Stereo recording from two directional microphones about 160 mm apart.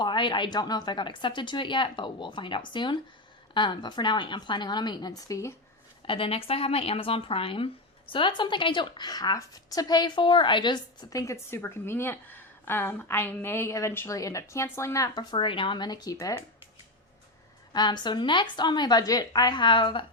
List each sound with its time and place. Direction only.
0.0 s speech: 30° left (ahead or behind)
6.1 s speech: 35° left (ahead or behind)
17.7 s speech: 25° left (ahead or behind)